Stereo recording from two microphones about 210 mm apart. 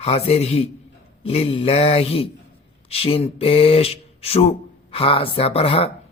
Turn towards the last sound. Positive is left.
turn(degrees=25)  # may be behind; listen again after turning